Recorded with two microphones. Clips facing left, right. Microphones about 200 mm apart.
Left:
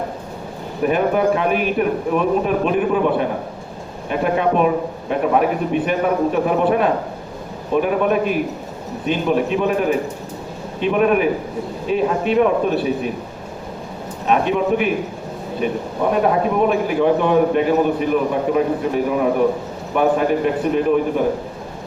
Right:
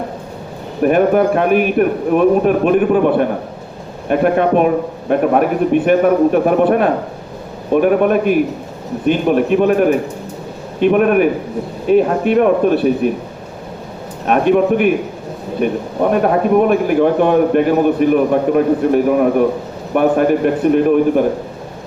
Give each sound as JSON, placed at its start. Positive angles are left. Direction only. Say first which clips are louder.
{"t": 0.8, "sound": "a man's voice", "louder": "right 5 dB", "side_deg": -55}
{"t": 14.3, "sound": "a man's voice", "louder": "right 5 dB", "side_deg": -55}